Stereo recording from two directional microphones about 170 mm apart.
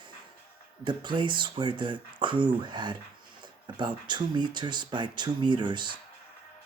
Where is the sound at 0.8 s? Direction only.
30° right (ahead or behind).